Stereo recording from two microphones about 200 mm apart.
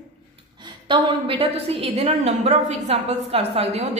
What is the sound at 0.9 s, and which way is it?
A woman's voice, 25° right (ahead or behind).